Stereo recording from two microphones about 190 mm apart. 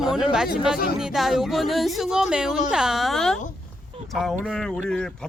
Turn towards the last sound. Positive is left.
turn(degrees=5)  # may be behind; listen again after turning